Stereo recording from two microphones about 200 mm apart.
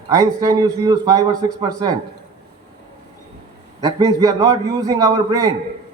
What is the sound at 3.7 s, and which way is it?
A man's voice, 20° right (ahead or behind).